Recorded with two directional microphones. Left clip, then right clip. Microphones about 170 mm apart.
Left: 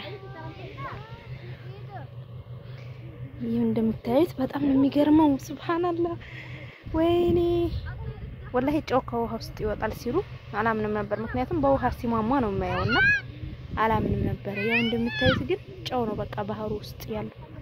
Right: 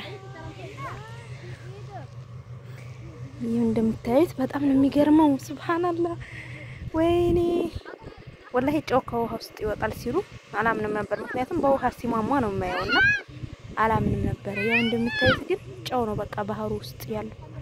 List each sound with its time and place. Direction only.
3.5 s speech: 10° right (ahead or behind)
12.7 s speech: 40° left (ahead or behind)
13.7 s speech: centre (ahead or behind)